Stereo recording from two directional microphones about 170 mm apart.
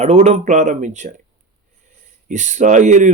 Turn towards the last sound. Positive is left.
turn(degrees=-45)  # may be behind; listen again after turning